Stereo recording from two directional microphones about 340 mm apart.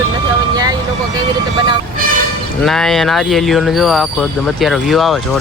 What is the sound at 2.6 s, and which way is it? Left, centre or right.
Speech, centre.